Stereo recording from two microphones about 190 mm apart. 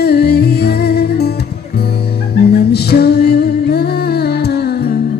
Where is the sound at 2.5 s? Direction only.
55° left (ahead or behind).